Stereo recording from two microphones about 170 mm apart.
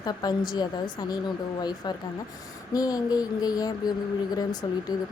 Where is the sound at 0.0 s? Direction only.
25° left (ahead or behind).